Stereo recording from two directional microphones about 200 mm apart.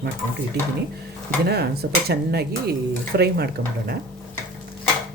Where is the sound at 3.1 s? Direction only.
55° right (ahead or behind).